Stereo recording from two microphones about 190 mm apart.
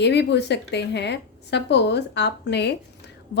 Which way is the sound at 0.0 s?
65° left (ahead or behind).